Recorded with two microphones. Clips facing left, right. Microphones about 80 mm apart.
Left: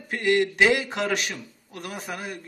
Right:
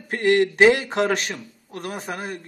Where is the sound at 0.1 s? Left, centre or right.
Right.